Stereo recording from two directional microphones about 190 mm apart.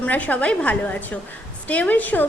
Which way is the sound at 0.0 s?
10° left (ahead or behind).